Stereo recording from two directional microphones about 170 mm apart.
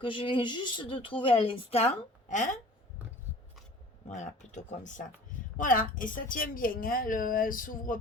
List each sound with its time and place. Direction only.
0.0 s speech: 30° left (ahead or behind); by 2.6 s 45° left (ahead or behind)
4.1 s a woman's voice: 45° left (ahead or behind)